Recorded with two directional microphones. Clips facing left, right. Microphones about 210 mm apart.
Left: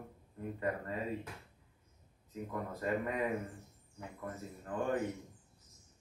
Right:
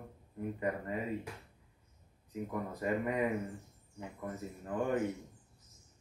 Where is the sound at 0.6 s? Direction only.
15° right (ahead or behind).